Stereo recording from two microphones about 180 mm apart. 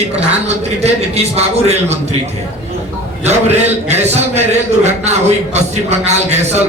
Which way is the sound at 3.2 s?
40° right (ahead or behind).